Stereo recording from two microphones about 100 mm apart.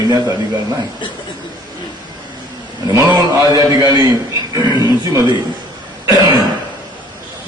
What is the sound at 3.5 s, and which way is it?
A man's voice, 35° right (ahead or behind).